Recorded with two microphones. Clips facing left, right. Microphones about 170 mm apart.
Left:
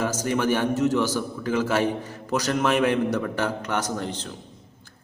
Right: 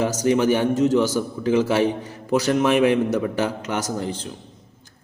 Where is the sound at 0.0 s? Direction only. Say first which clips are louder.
Right 5 dB; 15° right (ahead or behind).